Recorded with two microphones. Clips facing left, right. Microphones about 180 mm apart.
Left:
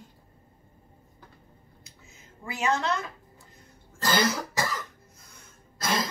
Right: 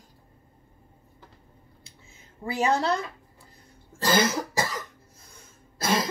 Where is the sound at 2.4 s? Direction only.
35° right (ahead or behind).